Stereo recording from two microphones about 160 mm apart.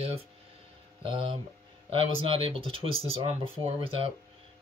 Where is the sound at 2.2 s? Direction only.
35° right (ahead or behind).